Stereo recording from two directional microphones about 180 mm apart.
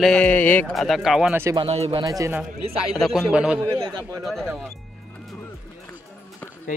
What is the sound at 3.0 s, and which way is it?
Speech, centre (ahead or behind).